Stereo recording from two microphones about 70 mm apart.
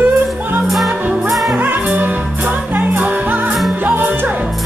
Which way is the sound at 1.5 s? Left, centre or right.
Right.